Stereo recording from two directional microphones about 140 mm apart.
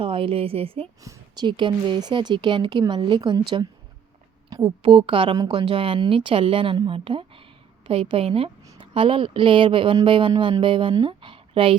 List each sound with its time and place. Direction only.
0.0 s speech: 40° right (ahead or behind)
1.0 s speech: 30° right (ahead or behind)
4.4 s a woman's voice: 35° right (ahead or behind)